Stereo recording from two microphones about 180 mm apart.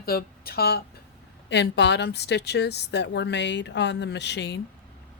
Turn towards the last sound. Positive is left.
turn(degrees=70)  # may be behind; listen again after turning